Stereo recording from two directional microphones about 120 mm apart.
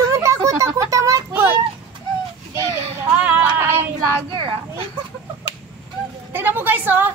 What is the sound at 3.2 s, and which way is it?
Female singing, 10° right (ahead or behind).